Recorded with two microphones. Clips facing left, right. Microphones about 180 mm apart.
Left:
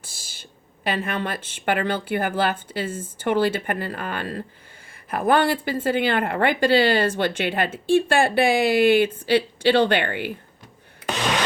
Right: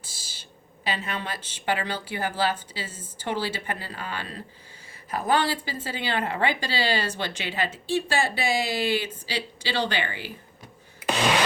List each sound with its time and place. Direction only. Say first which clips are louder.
0.9 s speech: left 5 dB; 55° left (ahead or behind)